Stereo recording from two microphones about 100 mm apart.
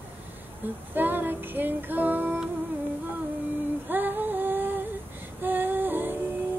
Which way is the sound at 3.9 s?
20° right (ahead or behind).